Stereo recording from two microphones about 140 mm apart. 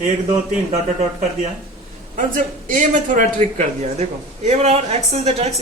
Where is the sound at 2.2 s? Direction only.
65° right (ahead or behind).